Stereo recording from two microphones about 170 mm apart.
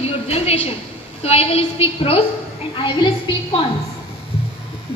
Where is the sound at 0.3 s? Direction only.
35° left (ahead or behind).